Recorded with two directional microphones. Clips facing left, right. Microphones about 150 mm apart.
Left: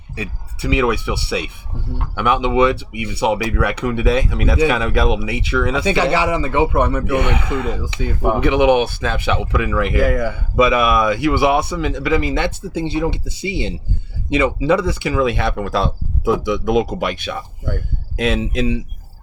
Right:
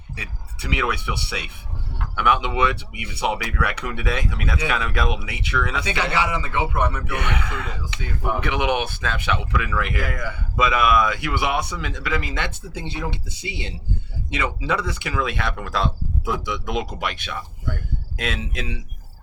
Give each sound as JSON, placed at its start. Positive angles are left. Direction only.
{"t": 0.7, "sound": "speech", "side_deg": 30}